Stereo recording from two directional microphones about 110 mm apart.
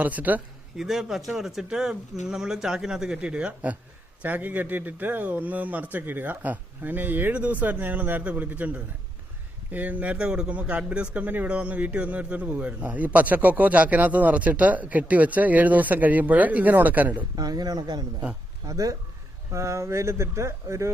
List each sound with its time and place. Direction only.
0.0 s speech: 15° right (ahead or behind)
0.9 s speech: centre (ahead or behind)
17.3 s speech: 35° right (ahead or behind)